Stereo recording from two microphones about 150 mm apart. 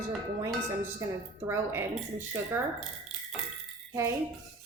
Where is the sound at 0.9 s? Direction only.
15° right (ahead or behind).